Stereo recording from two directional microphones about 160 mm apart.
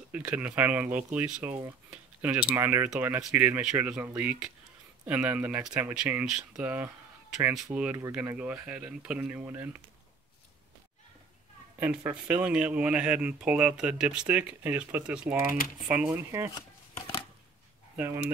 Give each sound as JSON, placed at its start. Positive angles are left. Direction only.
{"t": 0.1, "sound": "speech", "side_deg": -10}
{"t": 11.8, "sound": "speech", "side_deg": -10}
{"t": 17.9, "sound": "speech", "side_deg": -15}